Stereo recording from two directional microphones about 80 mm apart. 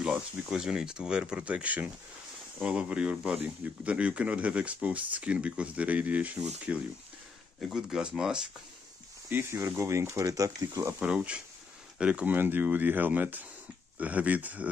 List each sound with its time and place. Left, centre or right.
0.0 s speech: centre
7.6 s speech: centre
9.3 s speech: right
11.0 s speech: centre